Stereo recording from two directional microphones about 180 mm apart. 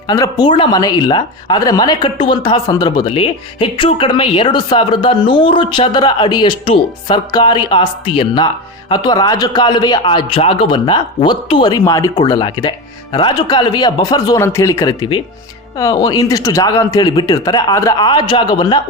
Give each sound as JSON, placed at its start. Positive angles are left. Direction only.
{"t": 0.1, "sound": "speech", "side_deg": 20}